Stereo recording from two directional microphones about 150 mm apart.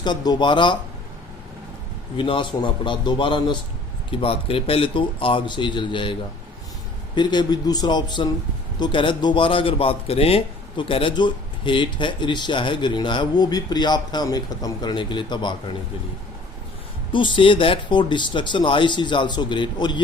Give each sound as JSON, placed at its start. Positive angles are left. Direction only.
{"t": 0.0, "sound": "a man's voice", "side_deg": 30}
{"t": 2.1, "sound": "a man's voice", "side_deg": 35}
{"t": 7.2, "sound": "a man's voice", "side_deg": 30}
{"t": 17.1, "sound": "a man's voice", "side_deg": 35}